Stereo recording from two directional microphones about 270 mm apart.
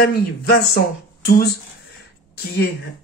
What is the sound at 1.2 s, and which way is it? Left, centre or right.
Speech, left.